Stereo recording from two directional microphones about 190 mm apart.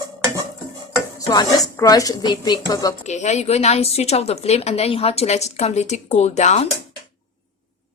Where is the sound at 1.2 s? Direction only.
20° left (ahead or behind).